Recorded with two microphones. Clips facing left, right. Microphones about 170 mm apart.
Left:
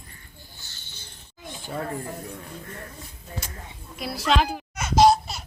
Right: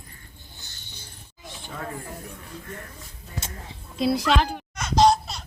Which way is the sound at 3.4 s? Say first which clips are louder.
Right 1 dB; 25° right (ahead or behind).